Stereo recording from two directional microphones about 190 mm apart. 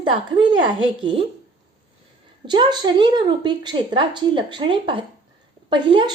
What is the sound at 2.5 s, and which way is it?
Speech, 25° right (ahead or behind).